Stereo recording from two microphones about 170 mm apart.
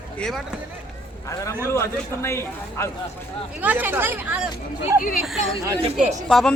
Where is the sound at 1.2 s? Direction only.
20° left (ahead or behind).